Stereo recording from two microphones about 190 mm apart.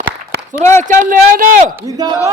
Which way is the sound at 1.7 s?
20° right (ahead or behind).